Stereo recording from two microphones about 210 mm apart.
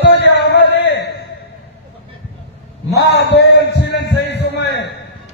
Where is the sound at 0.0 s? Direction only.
55° left (ahead or behind).